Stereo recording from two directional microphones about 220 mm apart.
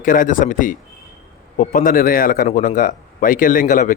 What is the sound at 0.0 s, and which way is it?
A man's voice, 40° left (ahead or behind).